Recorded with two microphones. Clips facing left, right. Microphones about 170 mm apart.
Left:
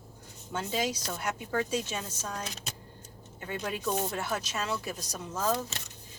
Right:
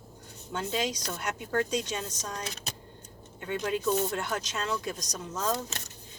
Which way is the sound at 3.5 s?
5° left (ahead or behind).